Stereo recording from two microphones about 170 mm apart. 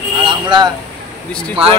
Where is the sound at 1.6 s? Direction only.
35° right (ahead or behind).